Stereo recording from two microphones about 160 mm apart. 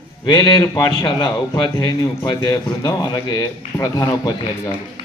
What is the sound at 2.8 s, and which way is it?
A man's voice, 25° left (ahead or behind).